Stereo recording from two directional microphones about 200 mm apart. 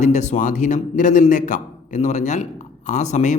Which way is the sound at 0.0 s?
35° left (ahead or behind).